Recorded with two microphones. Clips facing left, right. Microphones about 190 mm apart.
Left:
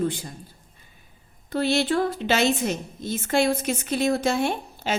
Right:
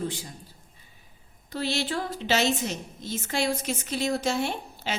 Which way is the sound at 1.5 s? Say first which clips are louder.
Left 7 dB; 55° left (ahead or behind).